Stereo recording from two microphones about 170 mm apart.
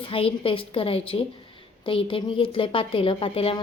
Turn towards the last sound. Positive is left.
turn(degrees=35)  # may be behind; listen again after turning